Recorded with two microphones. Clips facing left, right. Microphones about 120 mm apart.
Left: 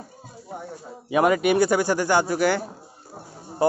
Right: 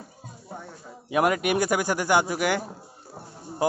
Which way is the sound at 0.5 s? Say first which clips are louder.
Left 4 dB; 15° left (ahead or behind).